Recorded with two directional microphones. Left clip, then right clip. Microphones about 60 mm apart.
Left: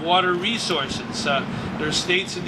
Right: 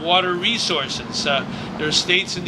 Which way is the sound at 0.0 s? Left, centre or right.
Right.